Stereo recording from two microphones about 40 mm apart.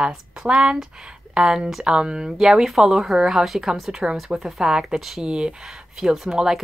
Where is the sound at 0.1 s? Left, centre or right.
Centre.